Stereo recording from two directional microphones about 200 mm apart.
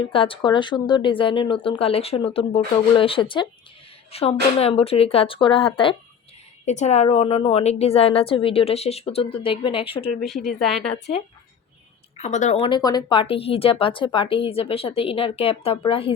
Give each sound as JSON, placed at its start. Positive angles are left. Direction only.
{"t": 0.0, "sound": "speech", "side_deg": 25}
{"t": 10.2, "sound": "a woman's voice", "side_deg": 0}
{"t": 12.1, "sound": "speech", "side_deg": 35}